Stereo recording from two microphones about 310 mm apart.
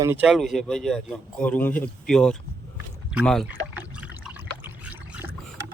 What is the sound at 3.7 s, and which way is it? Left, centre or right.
Trickle, centre.